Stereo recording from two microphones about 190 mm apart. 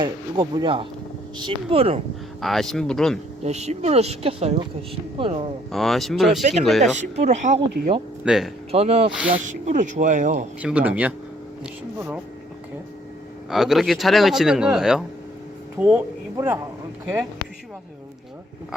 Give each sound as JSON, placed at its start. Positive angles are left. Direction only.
{"t": 0.0, "sound": "speech", "side_deg": -25}
{"t": 2.4, "sound": "a man's voice", "side_deg": 0}
{"t": 3.4, "sound": "speech", "side_deg": -35}
{"t": 5.7, "sound": "a man's voice", "side_deg": 0}
{"t": 6.4, "sound": "speech", "side_deg": -40}
{"t": 8.2, "sound": "speech", "side_deg": -5}
{"t": 8.7, "sound": "speech", "side_deg": -35}
{"t": 10.6, "sound": "speech", "side_deg": -5}
{"t": 13.5, "sound": "a man's voice", "side_deg": 0}